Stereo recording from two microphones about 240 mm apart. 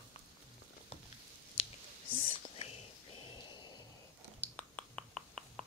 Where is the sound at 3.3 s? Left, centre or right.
Centre.